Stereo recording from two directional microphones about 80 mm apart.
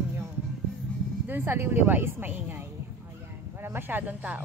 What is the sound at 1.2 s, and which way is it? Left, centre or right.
Speech, right.